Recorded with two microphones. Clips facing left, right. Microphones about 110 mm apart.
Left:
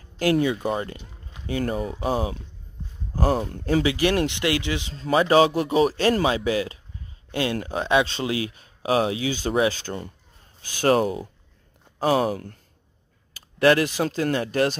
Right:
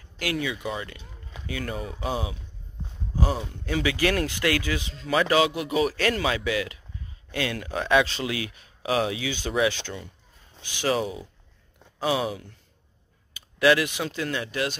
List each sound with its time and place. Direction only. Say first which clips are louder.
0.2 s speech: left 8 dB; 40° left (ahead or behind)
3.8 s speech: right 1 dB; 25° left (ahead or behind); by 12.5 s 45° left (ahead or behind)
13.6 s speech: left 3 dB; 40° left (ahead or behind)